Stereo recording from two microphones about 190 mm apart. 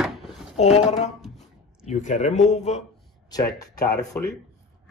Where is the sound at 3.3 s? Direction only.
20° left (ahead or behind).